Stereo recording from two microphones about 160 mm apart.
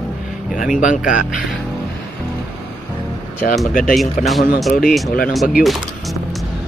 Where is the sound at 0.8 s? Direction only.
55° left (ahead or behind).